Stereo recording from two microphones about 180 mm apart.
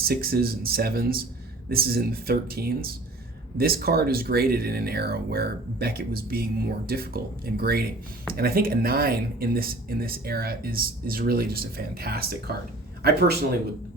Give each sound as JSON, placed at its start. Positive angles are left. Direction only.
{"t": 0.0, "sound": "speech", "side_deg": -55}